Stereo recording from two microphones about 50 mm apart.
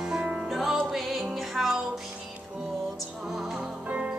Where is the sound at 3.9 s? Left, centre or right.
Right.